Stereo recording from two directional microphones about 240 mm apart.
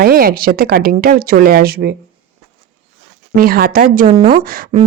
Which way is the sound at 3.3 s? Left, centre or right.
Right.